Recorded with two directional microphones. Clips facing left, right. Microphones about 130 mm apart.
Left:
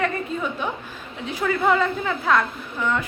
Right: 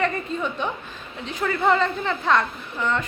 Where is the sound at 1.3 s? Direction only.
5° left (ahead or behind).